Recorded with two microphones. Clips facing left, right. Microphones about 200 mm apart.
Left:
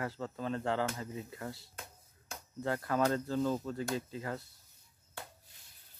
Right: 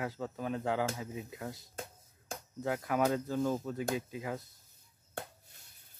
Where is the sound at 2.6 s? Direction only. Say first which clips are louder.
Even; 10° right (ahead or behind).